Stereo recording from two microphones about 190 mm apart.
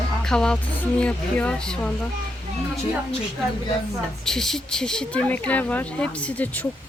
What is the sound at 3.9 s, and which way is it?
A woman's voice, centre (ahead or behind).